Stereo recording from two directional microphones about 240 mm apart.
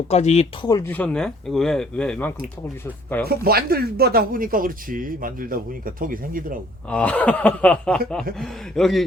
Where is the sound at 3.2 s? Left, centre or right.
Right.